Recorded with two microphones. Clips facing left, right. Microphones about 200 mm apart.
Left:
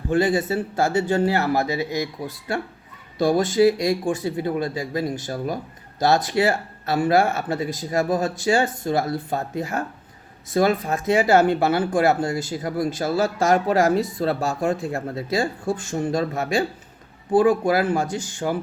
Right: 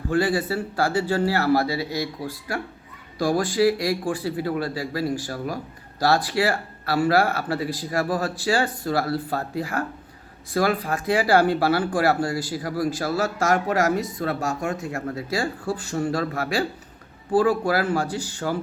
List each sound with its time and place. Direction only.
0.1 s speech: 20° left (ahead or behind)